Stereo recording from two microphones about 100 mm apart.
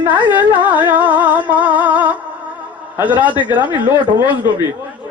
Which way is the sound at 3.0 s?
15° right (ahead or behind).